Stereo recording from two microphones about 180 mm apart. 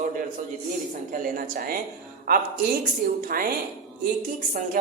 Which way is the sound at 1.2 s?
50° right (ahead or behind).